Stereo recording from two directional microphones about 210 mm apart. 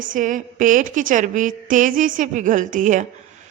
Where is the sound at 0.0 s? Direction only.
40° right (ahead or behind).